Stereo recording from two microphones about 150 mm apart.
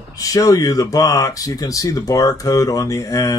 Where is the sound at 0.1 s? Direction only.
25° left (ahead or behind).